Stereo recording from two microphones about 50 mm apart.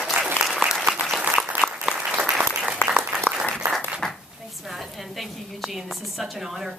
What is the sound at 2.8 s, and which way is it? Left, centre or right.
Applause, left.